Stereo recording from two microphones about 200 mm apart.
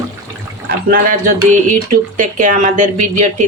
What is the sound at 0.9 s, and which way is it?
A woman's voice, 45° right (ahead or behind).